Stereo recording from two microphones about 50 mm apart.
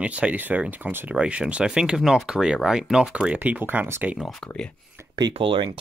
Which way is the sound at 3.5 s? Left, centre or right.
Right.